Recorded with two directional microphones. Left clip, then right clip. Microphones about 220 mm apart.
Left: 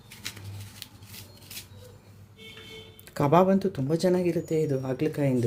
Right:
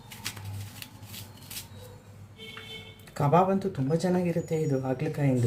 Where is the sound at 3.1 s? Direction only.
50° left (ahead or behind).